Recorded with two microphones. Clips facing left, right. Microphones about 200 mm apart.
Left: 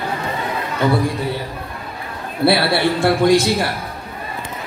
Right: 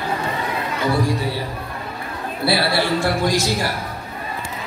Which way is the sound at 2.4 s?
60° left (ahead or behind).